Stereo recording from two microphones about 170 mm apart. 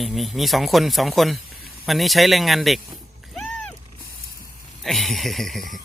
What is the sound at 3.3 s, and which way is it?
Music, 5° left (ahead or behind).